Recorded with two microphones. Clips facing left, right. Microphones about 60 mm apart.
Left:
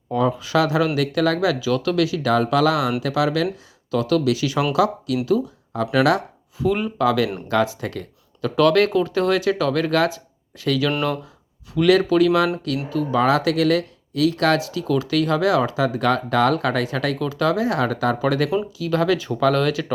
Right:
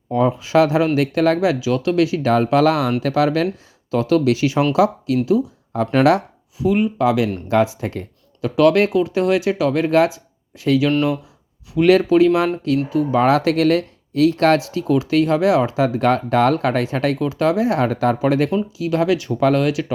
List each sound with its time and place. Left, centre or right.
0.1 s speech: right
3.9 s speech: right
6.6 s speech: centre
7.0 s speech: right
8.5 s speech: centre
12.9 s speech: centre
13.1 s speech: right
18.9 s speech: centre